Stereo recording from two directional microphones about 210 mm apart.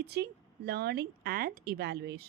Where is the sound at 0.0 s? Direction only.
50° right (ahead or behind).